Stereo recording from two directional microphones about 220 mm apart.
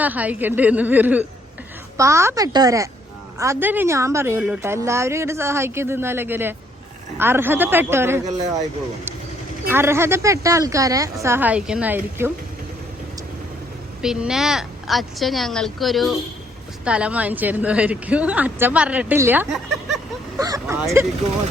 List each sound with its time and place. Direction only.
0.0 s a woman's voice: 5° right (ahead or behind)
9.6 s a woman's voice: 10° right (ahead or behind)
14.0 s a woman's voice: centre (ahead or behind)